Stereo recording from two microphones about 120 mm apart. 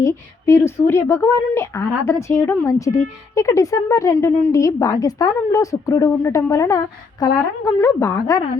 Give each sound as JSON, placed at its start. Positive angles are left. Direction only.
{"t": 0.0, "sound": "speech", "side_deg": 25}